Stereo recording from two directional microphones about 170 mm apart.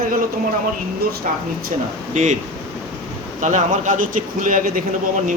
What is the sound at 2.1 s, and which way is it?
Speech, 45° right (ahead or behind).